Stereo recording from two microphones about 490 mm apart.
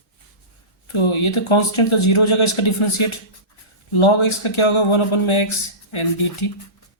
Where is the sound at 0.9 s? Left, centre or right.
Left.